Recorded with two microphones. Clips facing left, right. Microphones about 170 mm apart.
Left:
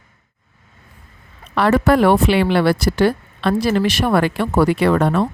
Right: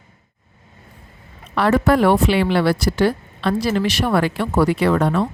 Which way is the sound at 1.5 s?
65° left (ahead or behind).